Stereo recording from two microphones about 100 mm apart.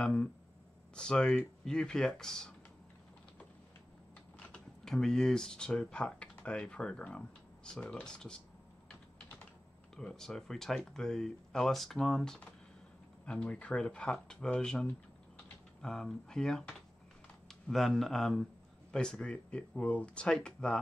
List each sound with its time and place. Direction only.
0.0 s speech: 10° left (ahead or behind)
4.5 s speech: 5° left (ahead or behind)
9.9 s speech: 5° left (ahead or behind)